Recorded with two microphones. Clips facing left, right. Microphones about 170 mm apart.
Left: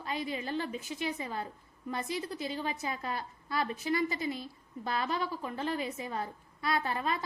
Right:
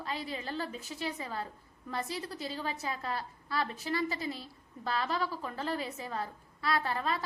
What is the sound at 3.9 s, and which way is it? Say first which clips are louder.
Speech: left 1 dB; 35° right (ahead or behind).